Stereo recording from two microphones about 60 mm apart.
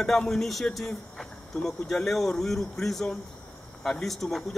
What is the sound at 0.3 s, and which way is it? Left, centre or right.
Speech, centre.